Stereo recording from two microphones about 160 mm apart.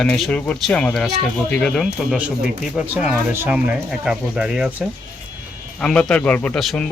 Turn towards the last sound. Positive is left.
turn(degrees=0)  # may be behind; listen again after turning